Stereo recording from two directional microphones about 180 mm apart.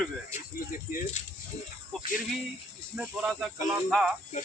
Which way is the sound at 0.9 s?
50° left (ahead or behind).